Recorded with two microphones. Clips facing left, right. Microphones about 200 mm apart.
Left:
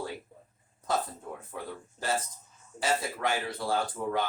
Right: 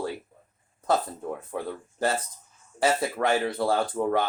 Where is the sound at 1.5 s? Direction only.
60° right (ahead or behind).